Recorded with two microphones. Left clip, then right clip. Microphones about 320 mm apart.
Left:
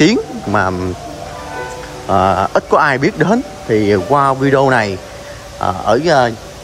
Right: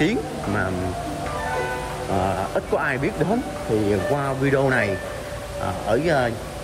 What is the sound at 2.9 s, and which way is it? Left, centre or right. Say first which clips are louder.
Speech: left 9 dB; left.